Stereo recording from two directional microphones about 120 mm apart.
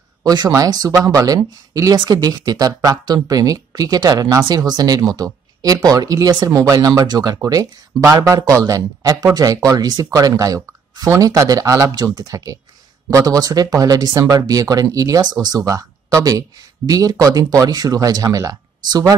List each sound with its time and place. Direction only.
0.2 s speech: 35° right (ahead or behind)